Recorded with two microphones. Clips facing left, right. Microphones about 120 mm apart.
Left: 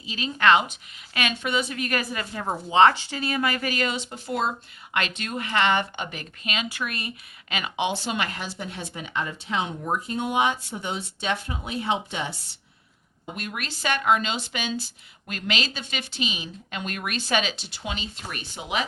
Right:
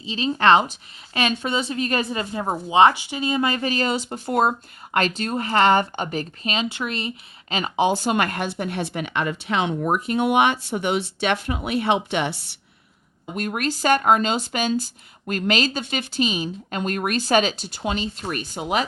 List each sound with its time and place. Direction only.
0.0 s a woman's voice: 30° right (ahead or behind); by 4.5 s 50° right (ahead or behind)
4.9 s speech: 40° right (ahead or behind)
7.5 s speech: 35° right (ahead or behind); by 12.5 s 70° right (ahead or behind)
13.3 s speech: 45° right (ahead or behind)